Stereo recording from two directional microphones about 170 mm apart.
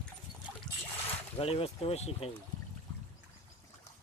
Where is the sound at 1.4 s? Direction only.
35° left (ahead or behind).